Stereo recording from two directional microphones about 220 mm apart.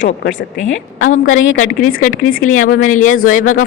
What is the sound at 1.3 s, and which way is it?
Speech, 65° left (ahead or behind).